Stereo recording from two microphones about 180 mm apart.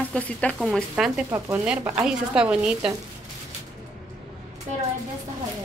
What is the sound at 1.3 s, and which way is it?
Speech, 15° right (ahead or behind).